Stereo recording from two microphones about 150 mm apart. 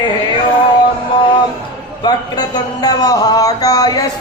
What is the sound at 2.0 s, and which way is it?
A man's voice, 30° left (ahead or behind).